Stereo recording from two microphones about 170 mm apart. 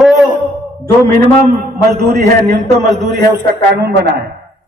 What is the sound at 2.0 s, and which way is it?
Speech, 70° right (ahead or behind).